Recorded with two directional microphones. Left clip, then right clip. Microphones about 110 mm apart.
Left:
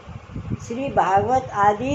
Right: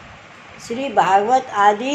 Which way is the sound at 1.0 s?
40° right (ahead or behind).